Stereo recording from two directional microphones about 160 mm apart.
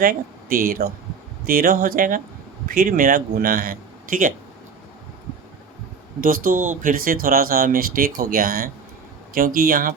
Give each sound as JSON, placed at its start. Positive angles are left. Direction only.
{"t": 0.0, "sound": "speech", "side_deg": -65}
{"t": 6.1, "sound": "speech", "side_deg": -60}